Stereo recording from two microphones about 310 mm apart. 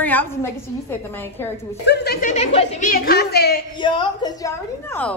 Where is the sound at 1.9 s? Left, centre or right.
Left.